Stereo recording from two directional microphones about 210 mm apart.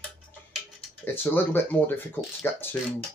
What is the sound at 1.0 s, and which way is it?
Speech, 10° left (ahead or behind).